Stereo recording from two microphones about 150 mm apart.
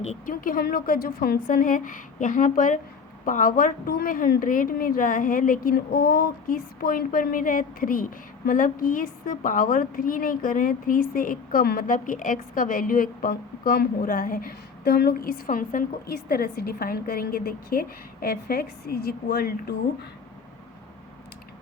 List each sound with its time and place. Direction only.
0.0 s speech: 50° left (ahead or behind)
0.4 s a woman's voice: 75° left (ahead or behind)